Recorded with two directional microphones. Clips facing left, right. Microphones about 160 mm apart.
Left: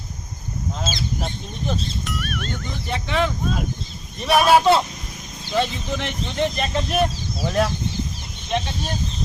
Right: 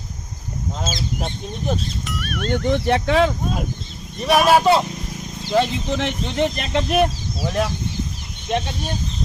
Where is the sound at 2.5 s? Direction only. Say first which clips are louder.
Right 10 dB; 75° right (ahead or behind).